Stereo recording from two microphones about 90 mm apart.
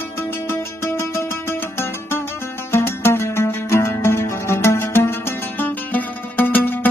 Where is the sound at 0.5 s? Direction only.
30° left (ahead or behind).